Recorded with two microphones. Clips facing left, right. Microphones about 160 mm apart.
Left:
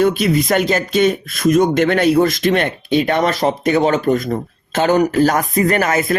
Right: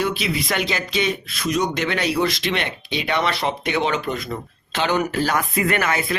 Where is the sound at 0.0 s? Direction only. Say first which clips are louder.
Left 9 dB; 50° left (ahead or behind).